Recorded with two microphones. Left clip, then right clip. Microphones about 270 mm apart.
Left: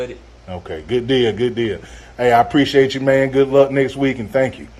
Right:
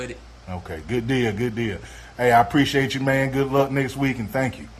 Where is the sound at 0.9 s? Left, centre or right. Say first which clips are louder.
Left 7 dB; centre.